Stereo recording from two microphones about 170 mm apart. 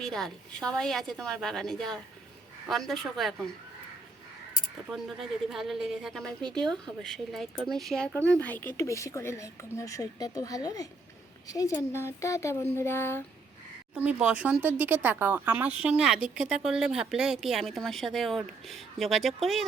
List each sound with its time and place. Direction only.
0.0 s speech: centre (ahead or behind)
4.9 s a woman's voice: centre (ahead or behind)
13.9 s speech: 10° right (ahead or behind)